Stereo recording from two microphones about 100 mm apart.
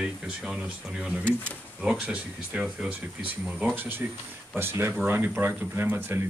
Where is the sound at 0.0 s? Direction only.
10° right (ahead or behind).